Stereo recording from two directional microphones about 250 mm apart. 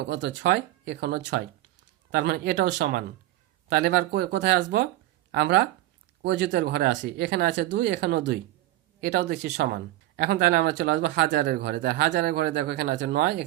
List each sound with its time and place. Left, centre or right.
0.1 s speech: right